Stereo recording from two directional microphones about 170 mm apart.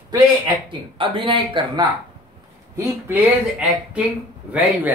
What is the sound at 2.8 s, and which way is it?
Speech, 10° right (ahead or behind).